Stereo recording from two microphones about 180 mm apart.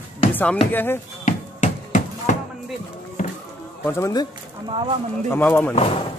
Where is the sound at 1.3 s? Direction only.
45° left (ahead or behind).